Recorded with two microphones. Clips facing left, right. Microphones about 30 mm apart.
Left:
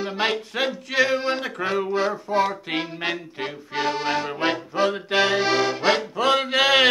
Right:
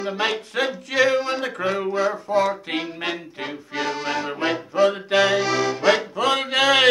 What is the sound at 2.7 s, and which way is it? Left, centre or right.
Accordion, left.